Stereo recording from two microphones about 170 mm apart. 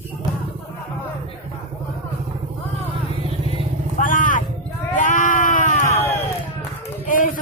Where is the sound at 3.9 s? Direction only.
50° left (ahead or behind).